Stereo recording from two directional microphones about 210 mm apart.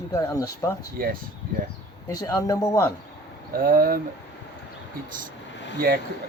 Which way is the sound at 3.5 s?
45° right (ahead or behind).